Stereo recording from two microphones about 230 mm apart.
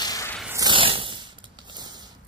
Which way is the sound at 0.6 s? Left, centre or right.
Right.